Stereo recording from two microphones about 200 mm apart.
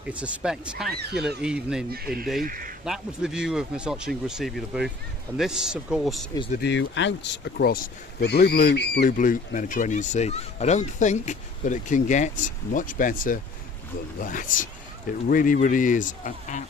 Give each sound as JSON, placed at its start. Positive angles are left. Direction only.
{"t": 0.1, "sound": "speech", "side_deg": -5}
{"t": 1.9, "sound": "speech", "side_deg": -50}
{"t": 2.8, "sound": "speech", "side_deg": 0}
{"t": 6.6, "sound": "speech", "side_deg": 65}
{"t": 9.0, "sound": "a man's voice", "side_deg": 40}